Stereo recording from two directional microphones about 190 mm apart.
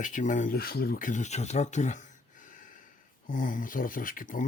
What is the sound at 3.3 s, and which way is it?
Speech, 45° left (ahead or behind).